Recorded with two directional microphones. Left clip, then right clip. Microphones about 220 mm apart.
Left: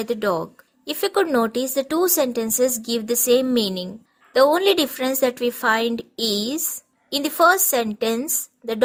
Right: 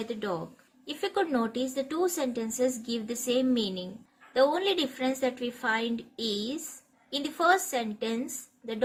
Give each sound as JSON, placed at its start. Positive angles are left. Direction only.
{"t": 0.0, "sound": "a woman's voice", "side_deg": 50}